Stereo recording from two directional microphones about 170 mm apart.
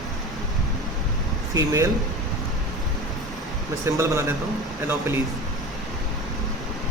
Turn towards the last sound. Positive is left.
turn(degrees=-10)  # may be behind; listen again after turning